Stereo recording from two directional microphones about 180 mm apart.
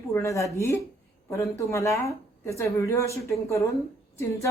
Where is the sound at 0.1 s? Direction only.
15° left (ahead or behind).